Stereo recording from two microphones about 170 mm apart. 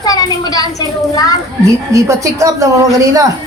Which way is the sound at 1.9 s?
20° right (ahead or behind).